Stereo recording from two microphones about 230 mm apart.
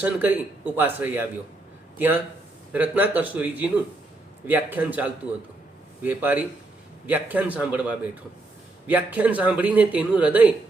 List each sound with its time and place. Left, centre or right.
0.0 s speech: centre